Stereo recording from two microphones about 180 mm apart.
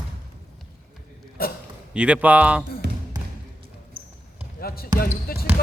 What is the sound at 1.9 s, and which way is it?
Speech, 5° right (ahead or behind).